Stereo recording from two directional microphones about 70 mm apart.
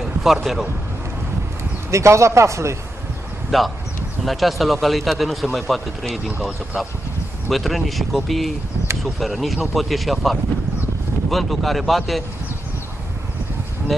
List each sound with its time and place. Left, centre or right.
0.0 s speech: centre
1.9 s a man's voice: right
3.5 s speech: centre